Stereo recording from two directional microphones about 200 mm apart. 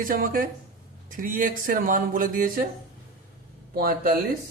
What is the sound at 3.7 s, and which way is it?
Speech, 45° right (ahead or behind).